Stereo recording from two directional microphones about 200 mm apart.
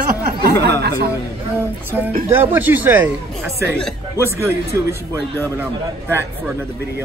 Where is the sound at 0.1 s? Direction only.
50° right (ahead or behind).